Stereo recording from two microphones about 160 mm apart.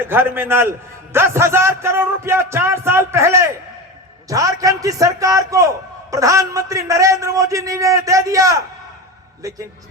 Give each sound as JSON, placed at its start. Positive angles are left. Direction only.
{"t": 0.0, "sound": "a man's voice", "side_deg": -15}